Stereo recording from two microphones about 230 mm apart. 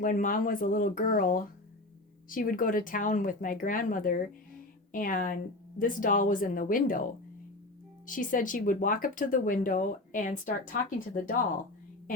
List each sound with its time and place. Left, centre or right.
0.0 s speech: left
8.0 s speech: left